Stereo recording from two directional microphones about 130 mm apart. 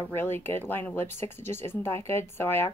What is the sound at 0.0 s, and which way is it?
Speech, 15° left (ahead or behind).